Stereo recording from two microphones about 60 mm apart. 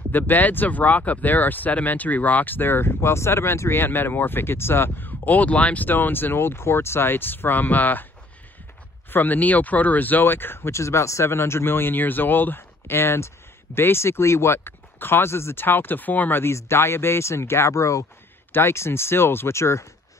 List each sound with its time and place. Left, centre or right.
0.1 s speech: left
9.1 s speech: left
18.5 s speech: left